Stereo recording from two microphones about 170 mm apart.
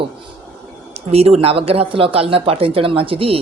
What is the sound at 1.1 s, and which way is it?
Speech, 35° right (ahead or behind).